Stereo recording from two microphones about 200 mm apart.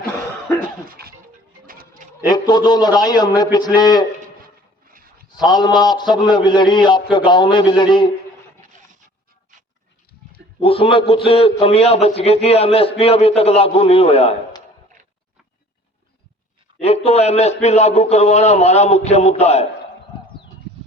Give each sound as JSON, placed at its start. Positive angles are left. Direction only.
{"t": 0.9, "sound": "a sound", "side_deg": -50}
{"t": 2.2, "sound": "a man's voice", "side_deg": 20}
{"t": 4.4, "sound": "music", "side_deg": -45}
{"t": 5.4, "sound": "a man's voice", "side_deg": 20}
{"t": 10.6, "sound": "a man's voice", "side_deg": 30}
{"t": 16.7, "sound": "a man's voice", "side_deg": 30}